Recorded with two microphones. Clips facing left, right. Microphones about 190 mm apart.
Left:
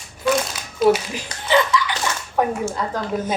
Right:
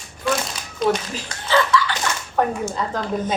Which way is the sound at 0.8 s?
5° left (ahead or behind).